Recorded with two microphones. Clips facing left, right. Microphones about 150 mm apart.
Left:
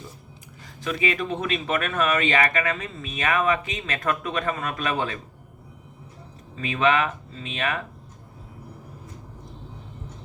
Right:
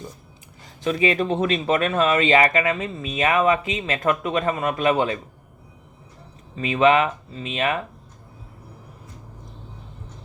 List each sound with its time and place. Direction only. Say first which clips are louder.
0.9 s speech: right 5 dB; 30° right (ahead or behind)
6.6 s speech: right 5 dB; 20° right (ahead or behind)